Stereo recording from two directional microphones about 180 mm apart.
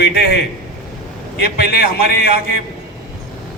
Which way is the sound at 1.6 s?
60° left (ahead or behind).